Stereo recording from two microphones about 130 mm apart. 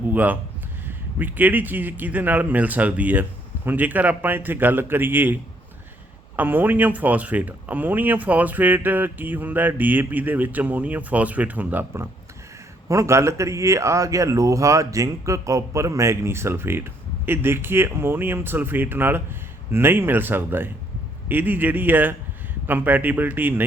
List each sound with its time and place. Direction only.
0.1 s speech: 15° right (ahead or behind)